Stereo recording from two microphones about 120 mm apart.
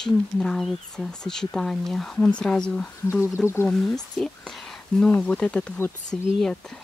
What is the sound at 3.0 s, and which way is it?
Speech, 20° left (ahead or behind).